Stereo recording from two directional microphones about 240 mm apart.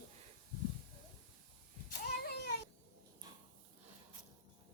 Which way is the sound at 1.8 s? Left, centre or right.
Left.